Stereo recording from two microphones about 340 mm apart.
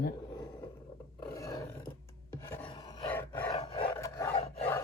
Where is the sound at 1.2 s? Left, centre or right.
Centre.